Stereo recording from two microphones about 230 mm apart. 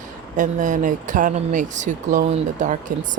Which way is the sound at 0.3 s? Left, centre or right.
Right.